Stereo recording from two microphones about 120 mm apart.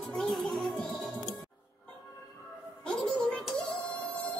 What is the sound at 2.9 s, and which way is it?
Music, 5° left (ahead or behind).